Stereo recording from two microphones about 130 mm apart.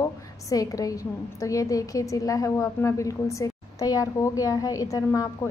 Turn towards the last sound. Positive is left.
turn(degrees=25)  # may be behind; listen again after turning